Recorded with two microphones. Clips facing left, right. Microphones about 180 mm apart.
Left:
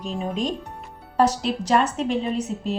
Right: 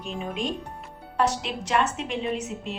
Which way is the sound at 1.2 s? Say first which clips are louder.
Left 5 dB; 40° left (ahead or behind).